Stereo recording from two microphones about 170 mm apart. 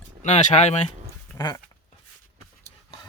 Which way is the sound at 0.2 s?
45° left (ahead or behind).